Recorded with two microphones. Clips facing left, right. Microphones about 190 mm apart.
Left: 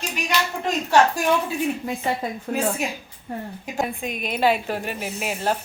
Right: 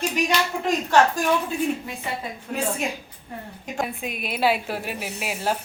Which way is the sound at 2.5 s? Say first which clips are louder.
Left 3 dB; 45° left (ahead or behind).